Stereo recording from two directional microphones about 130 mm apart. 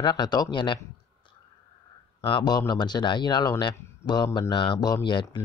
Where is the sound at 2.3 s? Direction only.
35° left (ahead or behind).